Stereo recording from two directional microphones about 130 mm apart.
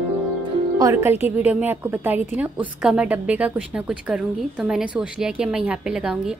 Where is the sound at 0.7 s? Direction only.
20° right (ahead or behind).